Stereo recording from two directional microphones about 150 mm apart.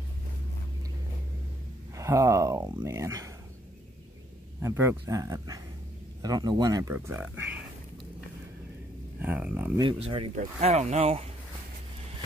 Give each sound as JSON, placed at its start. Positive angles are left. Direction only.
{"t": 2.0, "sound": "speech", "side_deg": -20}
{"t": 4.6, "sound": "speech", "side_deg": -20}
{"t": 9.2, "sound": "speech", "side_deg": -10}
{"t": 9.8, "sound": "speech", "side_deg": -35}
{"t": 10.3, "sound": "speech", "side_deg": -45}